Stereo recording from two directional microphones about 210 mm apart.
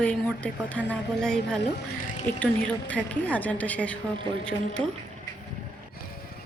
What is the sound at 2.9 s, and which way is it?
Speech, 5° left (ahead or behind).